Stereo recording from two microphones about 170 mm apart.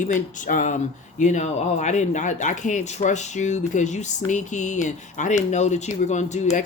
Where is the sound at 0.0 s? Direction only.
50° left (ahead or behind).